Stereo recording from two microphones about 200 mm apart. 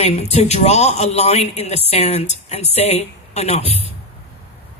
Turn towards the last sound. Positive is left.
turn(degrees=30)  # may be behind; listen again after turning